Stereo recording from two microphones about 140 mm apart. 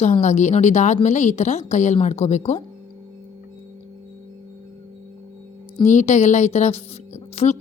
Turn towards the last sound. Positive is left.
turn(degrees=50)  # may be behind; listen again after turning